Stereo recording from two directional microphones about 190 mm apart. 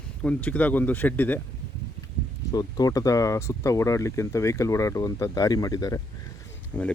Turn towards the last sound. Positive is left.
turn(degrees=10)  # may be behind; listen again after turning